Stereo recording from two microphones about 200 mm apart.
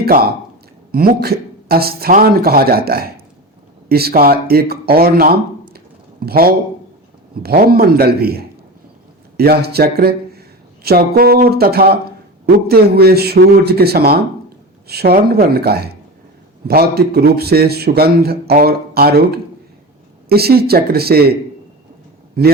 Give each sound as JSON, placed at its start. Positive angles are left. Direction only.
{"t": 0.0, "sound": "a man's voice", "side_deg": -50}
{"t": 5.7, "sound": "a sound", "side_deg": -50}
{"t": 7.4, "sound": "a man's voice", "side_deg": -50}
{"t": 22.4, "sound": "a man's voice", "side_deg": -50}